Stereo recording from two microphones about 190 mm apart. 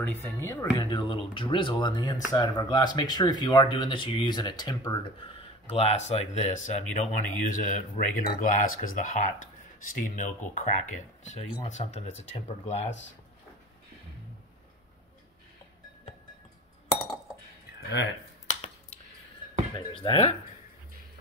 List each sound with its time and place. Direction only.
0.0 s speech: 10° left (ahead or behind)
0.8 s speech: 25° left (ahead or behind)
16.9 s chink: 5° left (ahead or behind)
17.7 s a sound: 60° left (ahead or behind)
19.9 s speech: 25° left (ahead or behind)